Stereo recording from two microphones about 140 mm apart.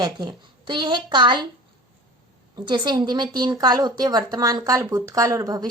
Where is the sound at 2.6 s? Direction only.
35° right (ahead or behind).